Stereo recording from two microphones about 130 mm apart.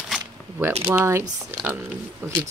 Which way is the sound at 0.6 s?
15° right (ahead or behind).